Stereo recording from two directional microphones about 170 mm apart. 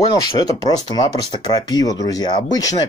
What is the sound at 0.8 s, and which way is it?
Speech, 25° left (ahead or behind).